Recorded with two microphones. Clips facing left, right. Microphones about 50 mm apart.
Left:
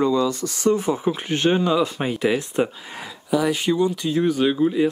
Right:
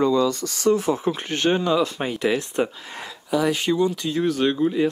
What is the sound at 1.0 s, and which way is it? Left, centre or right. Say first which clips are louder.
Speech: left 2 dB; centre.